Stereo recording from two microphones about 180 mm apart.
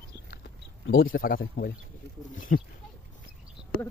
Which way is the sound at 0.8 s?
90° left.